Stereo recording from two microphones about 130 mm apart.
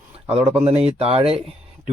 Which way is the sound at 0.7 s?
50° right (ahead or behind).